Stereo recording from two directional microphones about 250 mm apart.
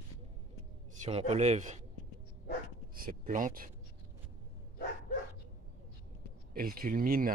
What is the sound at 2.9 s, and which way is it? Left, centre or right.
Speech, right.